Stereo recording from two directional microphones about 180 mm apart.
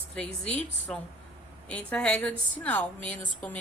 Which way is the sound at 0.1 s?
5° left (ahead or behind).